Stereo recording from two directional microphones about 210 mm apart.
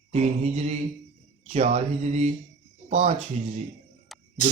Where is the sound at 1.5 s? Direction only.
30° right (ahead or behind).